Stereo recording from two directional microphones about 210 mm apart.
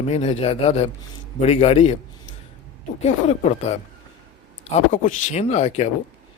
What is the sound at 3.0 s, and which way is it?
Speech, 30° left (ahead or behind).